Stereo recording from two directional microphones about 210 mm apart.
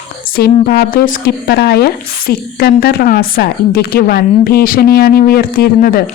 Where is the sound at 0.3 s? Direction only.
45° left (ahead or behind).